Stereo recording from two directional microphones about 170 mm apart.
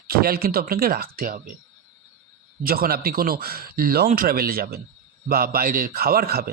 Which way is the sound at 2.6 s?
60° right (ahead or behind).